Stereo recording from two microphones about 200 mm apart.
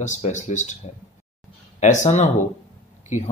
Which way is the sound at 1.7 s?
35° left (ahead or behind).